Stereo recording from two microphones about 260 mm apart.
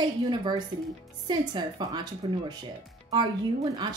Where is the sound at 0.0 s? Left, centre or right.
Centre.